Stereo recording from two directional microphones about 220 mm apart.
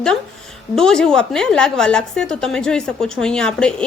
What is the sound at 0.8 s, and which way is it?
A woman's voice, 5° left (ahead or behind).